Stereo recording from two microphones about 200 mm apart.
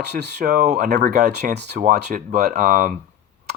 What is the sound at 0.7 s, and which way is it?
Speech, 55° right (ahead or behind).